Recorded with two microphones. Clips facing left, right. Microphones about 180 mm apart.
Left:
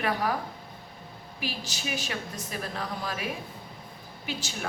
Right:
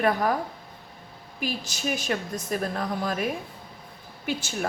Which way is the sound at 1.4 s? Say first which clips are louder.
Right 5 dB; 50° right (ahead or behind).